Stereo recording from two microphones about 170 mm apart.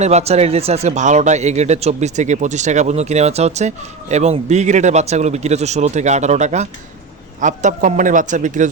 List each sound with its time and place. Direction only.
0.0 s speech: 40° right (ahead or behind)